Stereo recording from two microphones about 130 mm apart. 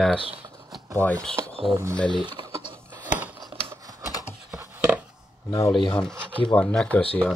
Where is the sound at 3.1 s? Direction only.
10° right (ahead or behind).